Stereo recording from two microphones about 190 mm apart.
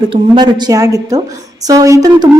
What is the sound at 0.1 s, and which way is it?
A woman's voice, 25° right (ahead or behind).